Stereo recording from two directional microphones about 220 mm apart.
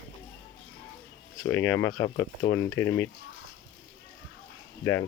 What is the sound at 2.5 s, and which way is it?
Speech, 10° left (ahead or behind).